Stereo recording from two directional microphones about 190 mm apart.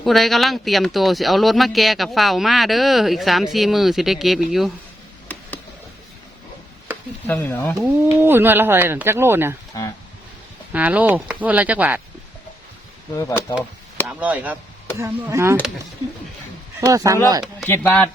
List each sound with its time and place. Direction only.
0.0 s speech: centre (ahead or behind)
7.3 s speech: 10° left (ahead or behind)
7.8 s speech: 10° right (ahead or behind)
10.7 s speech: 10° right (ahead or behind)
13.1 s speech: 15° left (ahead or behind)
14.1 s speech: 5° right (ahead or behind)
16.8 s speech: 15° right (ahead or behind)
17.7 s speech: 10° left (ahead or behind)